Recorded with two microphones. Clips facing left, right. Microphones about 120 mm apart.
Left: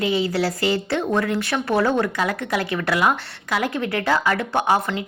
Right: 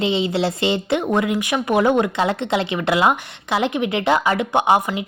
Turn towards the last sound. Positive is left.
turn(degrees=-15)  # may be behind; listen again after turning